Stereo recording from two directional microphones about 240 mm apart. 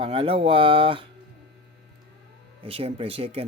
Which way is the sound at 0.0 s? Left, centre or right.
Right.